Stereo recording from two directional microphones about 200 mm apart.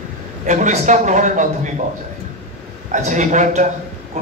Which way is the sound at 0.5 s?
35° right (ahead or behind).